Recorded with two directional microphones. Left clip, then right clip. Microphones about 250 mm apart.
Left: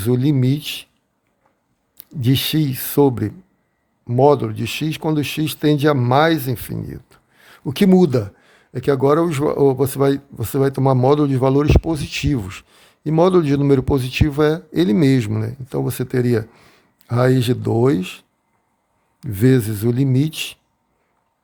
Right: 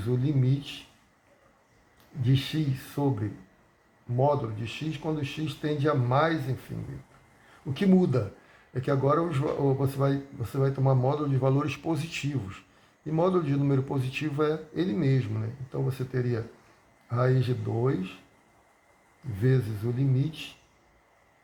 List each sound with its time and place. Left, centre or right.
0.0 s a man's voice: left
2.2 s a man's voice: left
7.7 s a man's voice: left
19.4 s a man's voice: left